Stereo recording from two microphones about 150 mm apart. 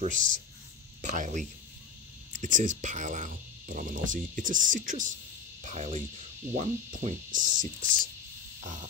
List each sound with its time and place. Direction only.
0.0 s speech: 55° right (ahead or behind)
5.6 s speech: 50° right (ahead or behind)